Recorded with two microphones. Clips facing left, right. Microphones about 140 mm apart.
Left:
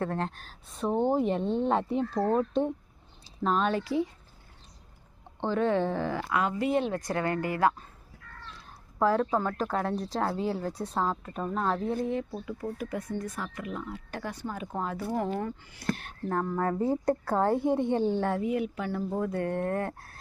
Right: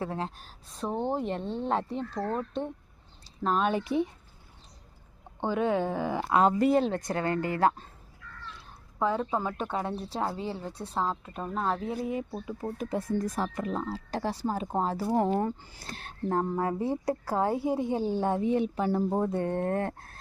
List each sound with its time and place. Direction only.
0.0 s speech: 5° right (ahead or behind)
2.2 s speech: 20° left (ahead or behind)
3.4 s speech: 5° right (ahead or behind)
3.7 s a woman's voice: 20° right (ahead or behind)
5.4 s speech: 10° right (ahead or behind)
6.2 s a woman's voice: 30° right (ahead or behind)
8.2 s a sound: 45° left (ahead or behind)
9.0 s a woman's voice: centre (ahead or behind)
12.7 s a woman's voice: 25° right (ahead or behind)
16.6 s a woman's voice: 10° right (ahead or behind); by 20.1 s 30° right (ahead or behind)